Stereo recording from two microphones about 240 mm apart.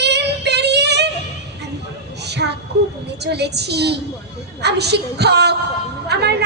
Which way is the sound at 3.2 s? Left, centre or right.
Right.